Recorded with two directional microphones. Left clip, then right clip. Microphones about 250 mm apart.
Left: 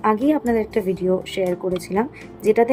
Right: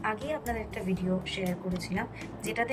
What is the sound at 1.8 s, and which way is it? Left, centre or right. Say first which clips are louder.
Speech: left 12 dB; left.